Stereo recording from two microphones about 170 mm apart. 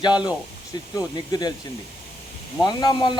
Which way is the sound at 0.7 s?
25° left (ahead or behind).